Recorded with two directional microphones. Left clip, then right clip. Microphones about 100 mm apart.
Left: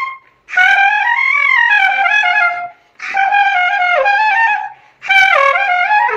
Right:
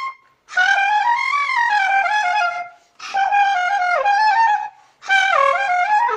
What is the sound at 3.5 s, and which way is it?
Music, 40° left (ahead or behind).